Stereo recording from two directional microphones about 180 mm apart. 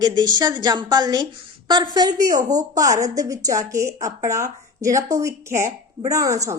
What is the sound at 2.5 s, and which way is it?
A woman's voice, 20° right (ahead or behind).